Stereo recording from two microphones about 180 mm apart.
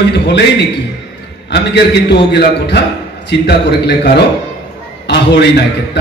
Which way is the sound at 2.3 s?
70° left (ahead or behind).